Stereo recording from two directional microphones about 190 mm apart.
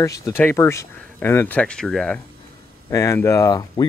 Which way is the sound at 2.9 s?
15° left (ahead or behind).